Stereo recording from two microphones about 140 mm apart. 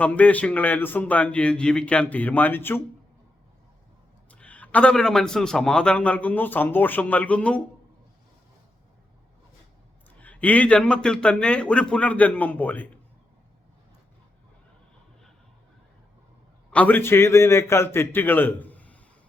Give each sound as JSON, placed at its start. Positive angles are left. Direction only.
{"t": 0.0, "sound": "a man's voice", "side_deg": 10}
{"t": 4.3, "sound": "a man's voice", "side_deg": 10}
{"t": 10.2, "sound": "a man's voice", "side_deg": 10}
{"t": 16.7, "sound": "a man's voice", "side_deg": 10}